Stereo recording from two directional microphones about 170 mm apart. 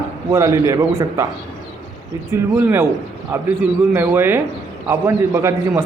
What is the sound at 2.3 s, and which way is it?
A man's voice, 15° right (ahead or behind).